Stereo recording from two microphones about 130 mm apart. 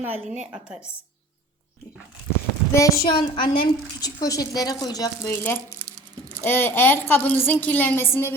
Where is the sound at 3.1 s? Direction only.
40° left (ahead or behind).